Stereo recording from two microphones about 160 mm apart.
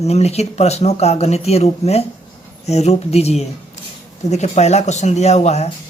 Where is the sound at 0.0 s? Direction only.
40° left (ahead or behind).